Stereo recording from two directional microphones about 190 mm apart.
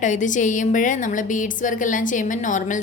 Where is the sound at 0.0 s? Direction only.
40° left (ahead or behind).